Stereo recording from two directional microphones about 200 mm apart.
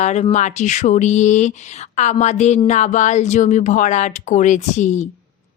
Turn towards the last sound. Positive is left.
turn(degrees=35)  # may be behind; listen again after turning